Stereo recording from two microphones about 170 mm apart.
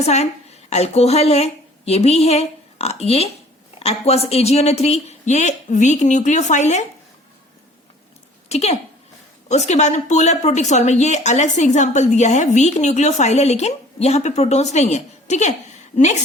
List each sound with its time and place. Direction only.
0.0 s a woman's voice: 40° left (ahead or behind)
8.4 s speech: 40° left (ahead or behind)